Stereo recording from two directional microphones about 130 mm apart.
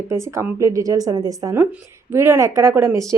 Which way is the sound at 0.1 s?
20° right (ahead or behind).